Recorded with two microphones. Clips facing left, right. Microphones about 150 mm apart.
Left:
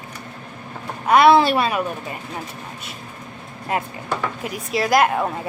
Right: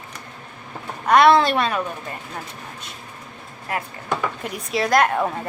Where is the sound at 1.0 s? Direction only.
5° left (ahead or behind).